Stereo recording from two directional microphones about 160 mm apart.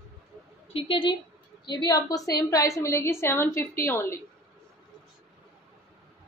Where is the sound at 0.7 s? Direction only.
35° left (ahead or behind).